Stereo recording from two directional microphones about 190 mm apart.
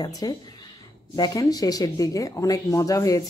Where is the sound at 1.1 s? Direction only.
20° left (ahead or behind).